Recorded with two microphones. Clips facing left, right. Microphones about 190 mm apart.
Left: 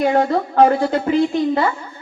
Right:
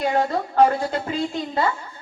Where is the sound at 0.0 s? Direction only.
50° left (ahead or behind).